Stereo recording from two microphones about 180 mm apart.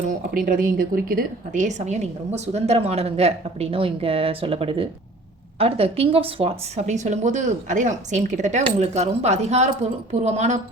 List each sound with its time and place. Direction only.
0.1 s a woman's voice: 50° right (ahead or behind)